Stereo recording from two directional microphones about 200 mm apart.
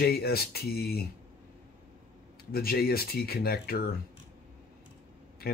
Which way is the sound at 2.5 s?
50° left (ahead or behind).